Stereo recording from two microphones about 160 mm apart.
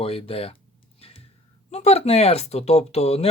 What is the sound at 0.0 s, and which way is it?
Speech, 35° left (ahead or behind).